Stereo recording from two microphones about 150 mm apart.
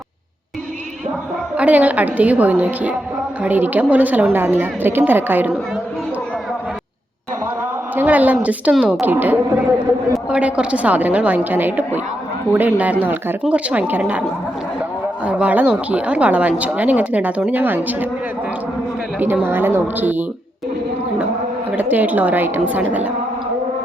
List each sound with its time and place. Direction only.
1.5 s speech: 10° right (ahead or behind)
7.9 s speech: 10° right (ahead or behind)
19.2 s speech: 15° right (ahead or behind)
21.8 s speech: 10° right (ahead or behind)